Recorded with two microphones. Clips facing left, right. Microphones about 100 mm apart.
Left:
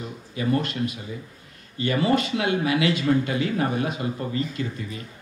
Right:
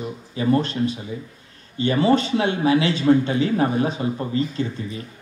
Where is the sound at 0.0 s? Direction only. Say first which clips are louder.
Right 4 dB; 30° right (ahead or behind).